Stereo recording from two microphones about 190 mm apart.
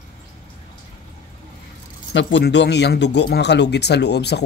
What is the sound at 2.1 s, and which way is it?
Speech, 65° left (ahead or behind).